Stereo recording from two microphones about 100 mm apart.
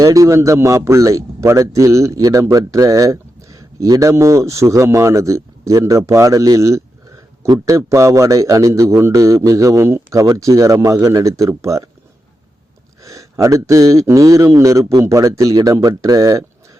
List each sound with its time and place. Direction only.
0.0 s a man's voice: 35° right (ahead or behind)
13.0 s a man's voice: 30° right (ahead or behind)